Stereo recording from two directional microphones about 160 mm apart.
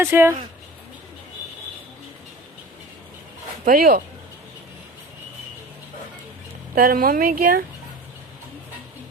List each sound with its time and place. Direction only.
0.0 s speech: 15° right (ahead or behind)
3.7 s speech: 65° right (ahead or behind)
6.7 s speech: 65° right (ahead or behind)